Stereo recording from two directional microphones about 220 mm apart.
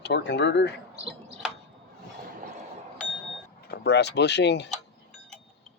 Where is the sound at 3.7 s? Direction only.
50° left (ahead or behind).